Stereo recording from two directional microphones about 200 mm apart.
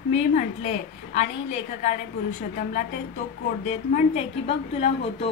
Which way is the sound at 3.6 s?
35° left (ahead or behind).